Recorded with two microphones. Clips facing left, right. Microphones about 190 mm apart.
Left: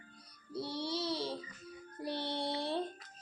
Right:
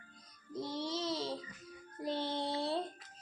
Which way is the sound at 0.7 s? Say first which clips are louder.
Even; 15° left (ahead or behind).